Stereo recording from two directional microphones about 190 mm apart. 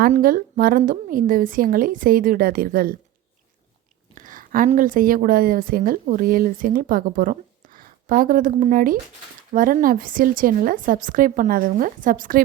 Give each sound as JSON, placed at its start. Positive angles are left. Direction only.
{"t": 0.1, "sound": "speech", "side_deg": -50}
{"t": 4.1, "sound": "a woman's voice", "side_deg": -45}